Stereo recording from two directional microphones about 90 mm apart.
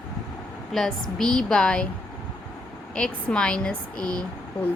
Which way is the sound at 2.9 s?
10° left (ahead or behind).